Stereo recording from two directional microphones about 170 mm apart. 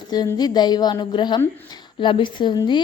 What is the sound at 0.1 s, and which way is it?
A woman's voice, 25° left (ahead or behind).